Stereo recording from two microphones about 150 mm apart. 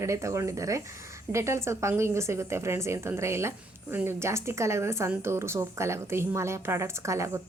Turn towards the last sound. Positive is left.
turn(degrees=-20)  # may be behind; listen again after turning